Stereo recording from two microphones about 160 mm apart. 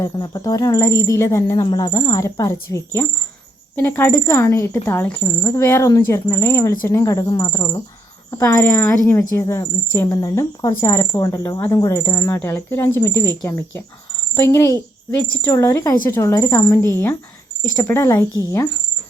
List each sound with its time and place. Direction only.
0.0 s speech: 25° left (ahead or behind)